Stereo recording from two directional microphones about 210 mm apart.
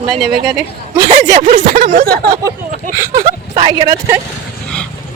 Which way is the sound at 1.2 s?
35° right (ahead or behind).